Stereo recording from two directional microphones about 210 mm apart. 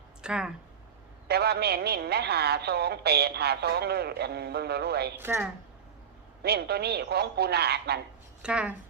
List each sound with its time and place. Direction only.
0.2 s speech: 5° right (ahead or behind)
1.3 s a woman's voice: 50° right (ahead or behind)
5.1 s speech: 10° right (ahead or behind)
6.4 s a woman's voice: 50° right (ahead or behind)
8.4 s speech: 5° right (ahead or behind)